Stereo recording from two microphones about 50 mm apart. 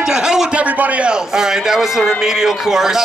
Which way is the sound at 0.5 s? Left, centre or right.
Right.